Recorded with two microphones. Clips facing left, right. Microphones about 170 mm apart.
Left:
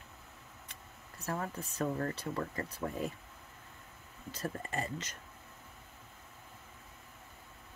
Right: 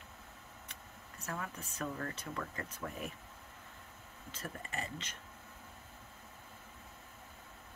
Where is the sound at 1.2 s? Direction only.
35° left (ahead or behind).